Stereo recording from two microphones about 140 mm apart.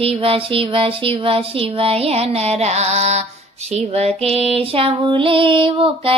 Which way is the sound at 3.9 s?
45° right (ahead or behind).